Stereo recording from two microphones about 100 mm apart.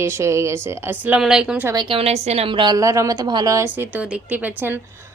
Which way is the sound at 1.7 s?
50° right (ahead or behind).